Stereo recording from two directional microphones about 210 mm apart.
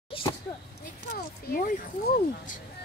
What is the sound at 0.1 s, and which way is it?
Speech, 25° left (ahead or behind).